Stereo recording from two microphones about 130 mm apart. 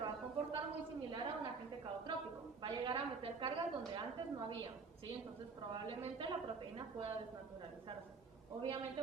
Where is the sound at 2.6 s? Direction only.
40° right (ahead or behind).